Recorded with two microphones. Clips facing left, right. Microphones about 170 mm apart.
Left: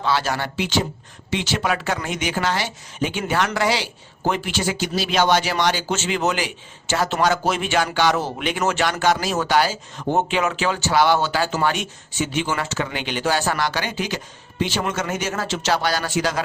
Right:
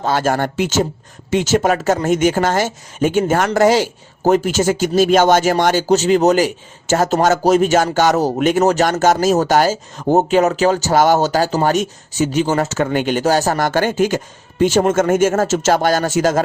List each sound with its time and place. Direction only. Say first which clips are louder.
0.0 s speech: right 6 dB; 50° right (ahead or behind)